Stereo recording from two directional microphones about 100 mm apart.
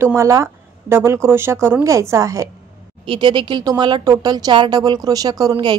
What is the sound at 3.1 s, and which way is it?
A woman's voice, 50° right (ahead or behind).